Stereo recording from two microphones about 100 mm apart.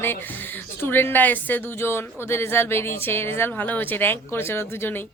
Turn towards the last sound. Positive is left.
turn(degrees=20)  # may be behind; listen again after turning